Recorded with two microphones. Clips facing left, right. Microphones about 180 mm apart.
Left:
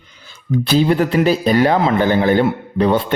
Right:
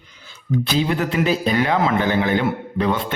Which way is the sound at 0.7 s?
35° left (ahead or behind).